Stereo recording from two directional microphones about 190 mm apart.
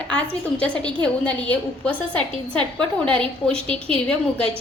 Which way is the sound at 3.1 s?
30° right (ahead or behind).